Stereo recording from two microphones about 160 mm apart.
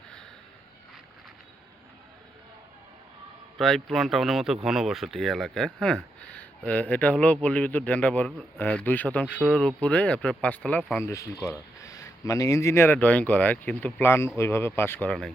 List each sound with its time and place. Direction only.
3.6 s a man's voice: centre (ahead or behind)
11.0 s a man's voice: 20° left (ahead or behind)